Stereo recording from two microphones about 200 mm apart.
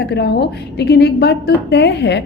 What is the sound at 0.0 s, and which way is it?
A woman's voice, 55° left (ahead or behind).